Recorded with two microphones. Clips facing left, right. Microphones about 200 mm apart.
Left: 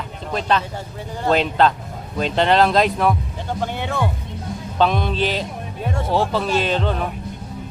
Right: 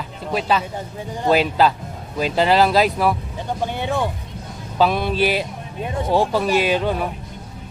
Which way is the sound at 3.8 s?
15° right (ahead or behind).